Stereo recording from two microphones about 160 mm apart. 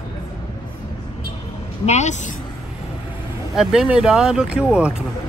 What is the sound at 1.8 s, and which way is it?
Speech, 45° left (ahead or behind).